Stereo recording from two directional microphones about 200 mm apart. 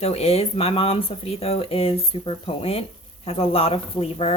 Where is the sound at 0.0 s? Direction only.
30° left (ahead or behind).